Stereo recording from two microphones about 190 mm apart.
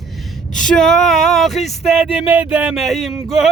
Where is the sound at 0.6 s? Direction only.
Centre (ahead or behind).